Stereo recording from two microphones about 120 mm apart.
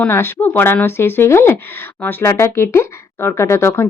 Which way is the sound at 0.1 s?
20° left (ahead or behind).